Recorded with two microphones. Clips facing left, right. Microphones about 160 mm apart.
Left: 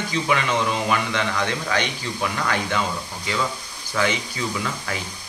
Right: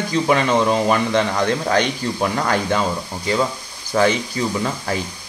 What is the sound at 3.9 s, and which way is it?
Speech, 40° right (ahead or behind).